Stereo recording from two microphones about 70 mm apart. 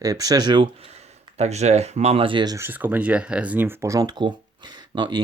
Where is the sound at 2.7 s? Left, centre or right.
Right.